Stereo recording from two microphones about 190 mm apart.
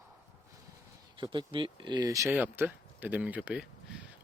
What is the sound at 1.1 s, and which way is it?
Speech, 25° right (ahead or behind).